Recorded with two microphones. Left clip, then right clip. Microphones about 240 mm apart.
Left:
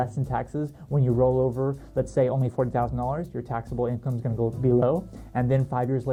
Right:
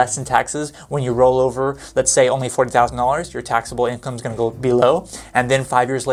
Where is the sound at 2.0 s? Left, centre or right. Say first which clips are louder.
Right 9 dB; centre.